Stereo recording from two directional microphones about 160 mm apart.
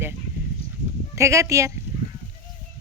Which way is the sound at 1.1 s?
20° right (ahead or behind).